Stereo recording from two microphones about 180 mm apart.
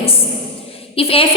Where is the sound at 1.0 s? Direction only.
30° left (ahead or behind).